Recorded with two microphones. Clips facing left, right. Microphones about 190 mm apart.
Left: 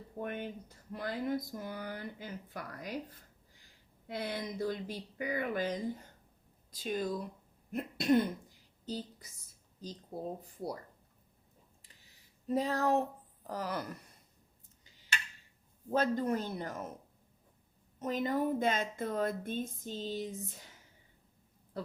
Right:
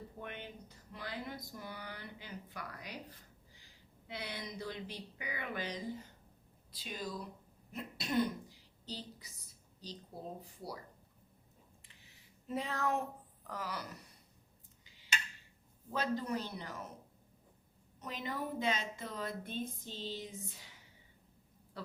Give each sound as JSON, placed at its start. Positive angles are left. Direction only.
{"t": 0.2, "sound": "a woman's voice", "side_deg": 45}
{"t": 12.5, "sound": "a sound", "side_deg": 40}
{"t": 13.5, "sound": "a woman's voice", "side_deg": 45}
{"t": 15.9, "sound": "a woman's voice", "side_deg": 50}
{"t": 18.0, "sound": "a woman's voice", "side_deg": 45}